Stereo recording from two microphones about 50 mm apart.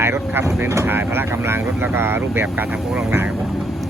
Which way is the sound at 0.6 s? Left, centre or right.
Right.